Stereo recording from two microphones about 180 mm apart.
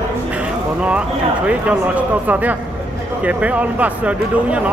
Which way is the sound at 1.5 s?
5° right (ahead or behind).